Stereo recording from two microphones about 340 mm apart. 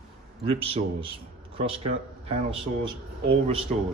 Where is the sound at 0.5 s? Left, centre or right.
Centre.